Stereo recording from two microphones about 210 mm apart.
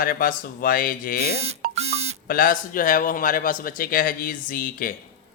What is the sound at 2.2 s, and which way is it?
Speech, 40° left (ahead or behind).